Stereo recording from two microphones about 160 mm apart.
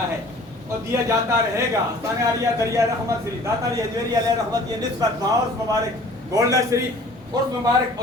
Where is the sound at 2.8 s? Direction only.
20° right (ahead or behind).